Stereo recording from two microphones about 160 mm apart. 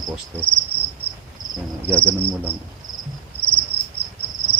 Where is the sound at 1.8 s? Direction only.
15° right (ahead or behind).